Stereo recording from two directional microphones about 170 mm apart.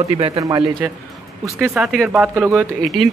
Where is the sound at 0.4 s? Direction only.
20° right (ahead or behind).